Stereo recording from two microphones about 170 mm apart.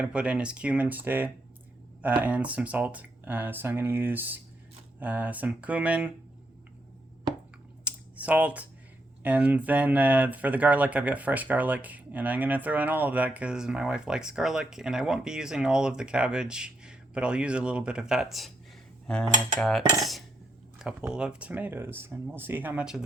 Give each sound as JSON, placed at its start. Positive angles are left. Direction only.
{"t": 0.0, "sound": "speech", "side_deg": -5}
{"t": 7.9, "sound": "computer keyboard", "side_deg": -10}
{"t": 9.2, "sound": "speech", "side_deg": -10}
{"t": 19.0, "sound": "mechanisms", "side_deg": 5}
{"t": 20.0, "sound": "cutlery", "side_deg": 0}
{"t": 20.7, "sound": "speech", "side_deg": -5}